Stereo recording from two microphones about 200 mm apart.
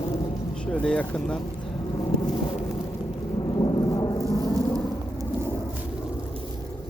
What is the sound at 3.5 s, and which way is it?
Thunder, 20° left (ahead or behind).